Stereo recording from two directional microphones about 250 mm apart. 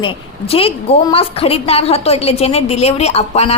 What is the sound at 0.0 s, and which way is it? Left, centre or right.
A woman's voice, left.